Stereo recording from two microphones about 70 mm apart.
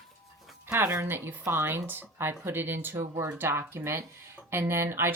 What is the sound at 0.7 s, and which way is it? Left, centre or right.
Speech, right.